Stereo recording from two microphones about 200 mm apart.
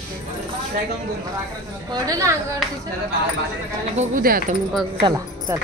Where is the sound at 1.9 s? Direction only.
15° right (ahead or behind).